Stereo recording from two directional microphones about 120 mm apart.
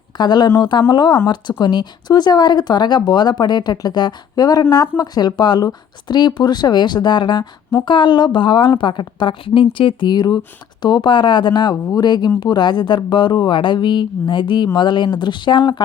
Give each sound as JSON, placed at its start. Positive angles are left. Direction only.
{"t": 0.2, "sound": "speech", "side_deg": 35}